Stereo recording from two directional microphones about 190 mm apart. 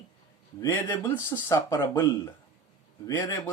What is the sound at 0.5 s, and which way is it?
Speech, 15° left (ahead or behind).